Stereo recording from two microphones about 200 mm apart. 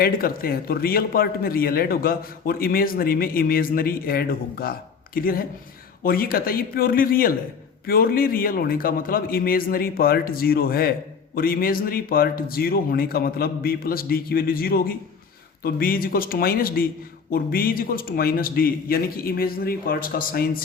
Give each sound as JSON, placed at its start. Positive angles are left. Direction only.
{"t": 0.0, "sound": "speech", "side_deg": 45}